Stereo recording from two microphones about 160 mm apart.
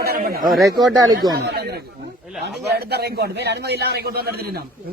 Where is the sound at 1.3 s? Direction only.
80° right.